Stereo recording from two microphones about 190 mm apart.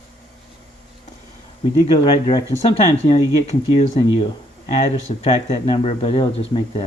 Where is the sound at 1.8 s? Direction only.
25° left (ahead or behind).